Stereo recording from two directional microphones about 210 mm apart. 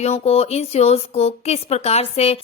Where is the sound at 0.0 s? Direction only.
30° left (ahead or behind).